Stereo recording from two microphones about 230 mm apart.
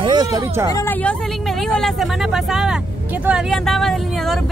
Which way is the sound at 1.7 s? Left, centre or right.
Centre.